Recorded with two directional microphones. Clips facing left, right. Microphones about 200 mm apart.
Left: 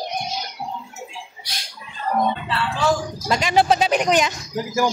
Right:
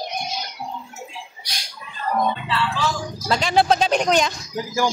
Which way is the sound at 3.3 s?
10° left (ahead or behind).